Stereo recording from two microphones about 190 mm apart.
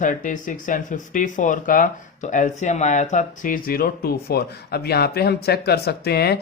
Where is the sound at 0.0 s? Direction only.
45° left (ahead or behind).